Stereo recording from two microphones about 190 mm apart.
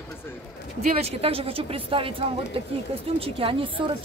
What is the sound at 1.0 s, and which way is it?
A woman's voice, 30° right (ahead or behind).